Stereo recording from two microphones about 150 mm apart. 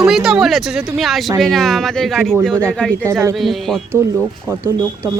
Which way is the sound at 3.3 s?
Centre (ahead or behind).